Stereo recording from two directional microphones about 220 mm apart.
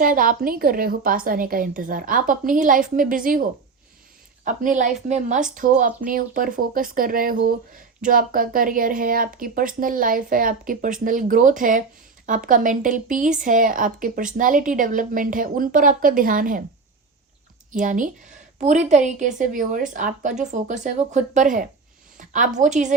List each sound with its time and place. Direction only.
0.0 s speech: 40° right (ahead or behind)
4.4 s speech: 35° right (ahead or behind)
17.7 s speech: 35° right (ahead or behind)